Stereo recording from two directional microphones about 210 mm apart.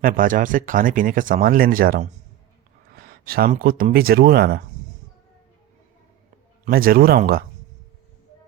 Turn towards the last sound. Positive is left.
turn(degrees=-45)  # may be behind; listen again after turning